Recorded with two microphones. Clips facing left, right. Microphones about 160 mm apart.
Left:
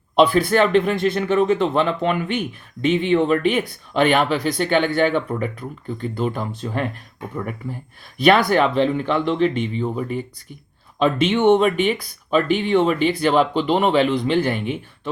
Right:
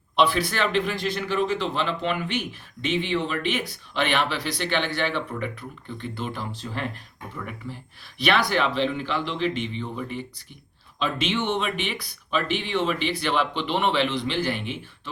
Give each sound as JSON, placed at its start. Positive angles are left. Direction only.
{"t": 0.2, "sound": "speech", "side_deg": 50}
{"t": 11.0, "sound": "speech", "side_deg": 55}